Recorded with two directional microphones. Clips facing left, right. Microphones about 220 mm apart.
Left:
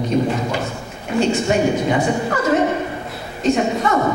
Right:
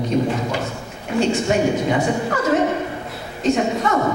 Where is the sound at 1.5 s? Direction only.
20° left (ahead or behind).